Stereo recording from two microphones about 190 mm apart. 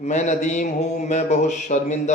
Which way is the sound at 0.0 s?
40° left (ahead or behind).